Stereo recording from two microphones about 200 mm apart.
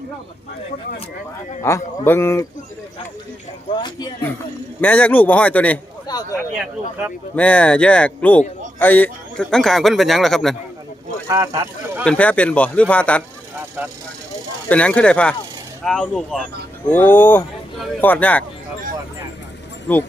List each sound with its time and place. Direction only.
1.6 s speech: 10° left (ahead or behind)
3.7 s speech: 25° left (ahead or behind)
4.8 s speech: 5° left (ahead or behind)
6.1 s a sound: 20° left (ahead or behind)
7.3 s a man's voice: 5° left (ahead or behind)
11.3 s speech: 15° right (ahead or behind)
12.0 s speech: 5° left (ahead or behind)
14.7 s a man's voice: 5° left (ahead or behind)
19.9 s speech: 10° left (ahead or behind)